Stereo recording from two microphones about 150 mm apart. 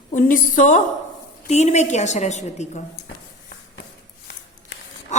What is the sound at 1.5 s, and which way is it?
A woman's voice, 45° left (ahead or behind).